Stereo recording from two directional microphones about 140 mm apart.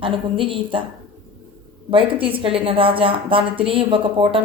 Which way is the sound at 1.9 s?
40° right (ahead or behind).